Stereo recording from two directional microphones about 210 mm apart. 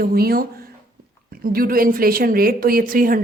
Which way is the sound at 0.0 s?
45° right (ahead or behind).